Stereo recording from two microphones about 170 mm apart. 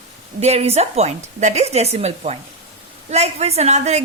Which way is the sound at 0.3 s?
40° right (ahead or behind).